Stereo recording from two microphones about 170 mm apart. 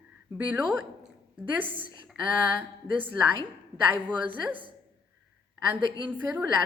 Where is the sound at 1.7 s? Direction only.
30° right (ahead or behind).